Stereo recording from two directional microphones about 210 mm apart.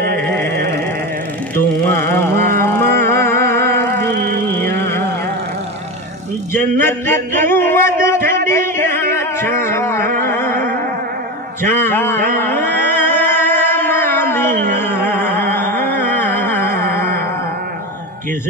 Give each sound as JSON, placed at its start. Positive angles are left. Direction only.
{"t": 1.9, "sound": "carnatic music", "side_deg": 10}
{"t": 2.3, "sound": "carnatic music", "side_deg": -45}
{"t": 2.6, "sound": "music", "side_deg": 10}
{"t": 4.1, "sound": "music", "side_deg": -50}
{"t": 6.5, "sound": "a sound", "side_deg": 10}
{"t": 10.1, "sound": "music", "side_deg": 10}
{"t": 11.6, "sound": "a sound", "side_deg": 10}
{"t": 12.4, "sound": "music", "side_deg": 10}
{"t": 15.0, "sound": "a sound", "side_deg": 10}